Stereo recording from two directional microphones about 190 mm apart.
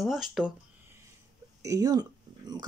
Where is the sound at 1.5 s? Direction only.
20° right (ahead or behind).